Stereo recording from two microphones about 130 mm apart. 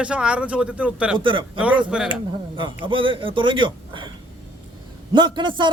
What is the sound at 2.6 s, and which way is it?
Speech, 40° right (ahead or behind).